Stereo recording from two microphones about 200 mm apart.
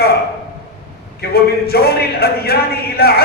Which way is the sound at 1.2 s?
50° left (ahead or behind).